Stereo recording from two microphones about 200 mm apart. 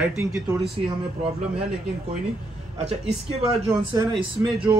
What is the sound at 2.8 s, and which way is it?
A man's voice, 30° right (ahead or behind).